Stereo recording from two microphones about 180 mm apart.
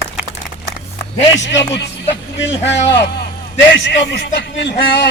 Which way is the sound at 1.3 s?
80° left.